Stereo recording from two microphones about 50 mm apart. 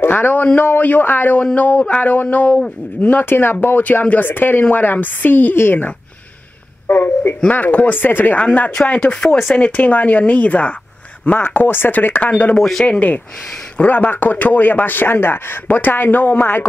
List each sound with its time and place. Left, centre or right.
0.0 s a man's voice: left
1.4 s a man's voice: left
7.5 s a man's voice: left
9.0 s speech: centre
9.6 s a man's voice: left
11.3 s speech: left
12.3 s speech: left
12.5 s speech: centre
12.8 s a man's voice: left